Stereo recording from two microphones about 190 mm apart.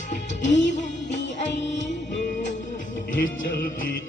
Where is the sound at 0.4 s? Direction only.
70° left (ahead or behind).